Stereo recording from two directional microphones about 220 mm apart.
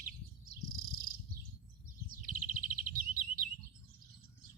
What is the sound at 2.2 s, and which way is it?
Chirp, 40° right (ahead or behind).